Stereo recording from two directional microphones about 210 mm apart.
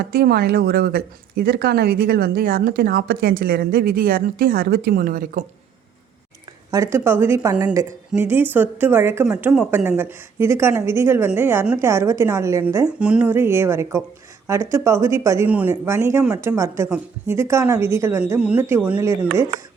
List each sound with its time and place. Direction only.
0.0 s speech: 50° right (ahead or behind)
6.7 s a woman's voice: 15° right (ahead or behind)